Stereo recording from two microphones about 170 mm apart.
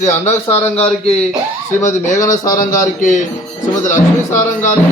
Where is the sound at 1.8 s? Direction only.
45° left (ahead or behind).